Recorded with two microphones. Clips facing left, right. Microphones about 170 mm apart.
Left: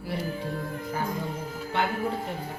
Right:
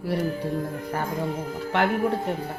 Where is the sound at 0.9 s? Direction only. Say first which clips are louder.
Right 1 dB; 65° right (ahead or behind).